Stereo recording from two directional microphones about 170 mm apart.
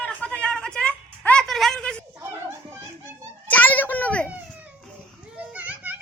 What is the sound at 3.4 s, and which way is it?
Children playing, 10° left (ahead or behind).